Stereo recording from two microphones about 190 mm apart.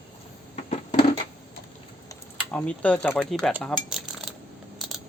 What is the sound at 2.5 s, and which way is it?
Speech, 5° left (ahead or behind).